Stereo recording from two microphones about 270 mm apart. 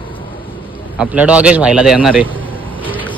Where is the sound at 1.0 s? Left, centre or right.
Centre.